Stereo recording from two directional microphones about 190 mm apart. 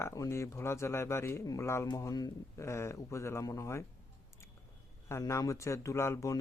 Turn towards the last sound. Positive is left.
turn(degrees=15)  # may be behind; listen again after turning